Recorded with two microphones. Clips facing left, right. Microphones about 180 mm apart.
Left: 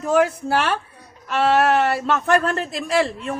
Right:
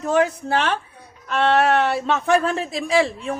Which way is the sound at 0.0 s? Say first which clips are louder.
Left 1 dB; 5° left (ahead or behind).